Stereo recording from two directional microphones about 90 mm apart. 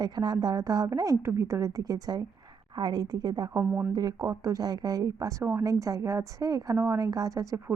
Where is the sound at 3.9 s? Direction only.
45° right (ahead or behind).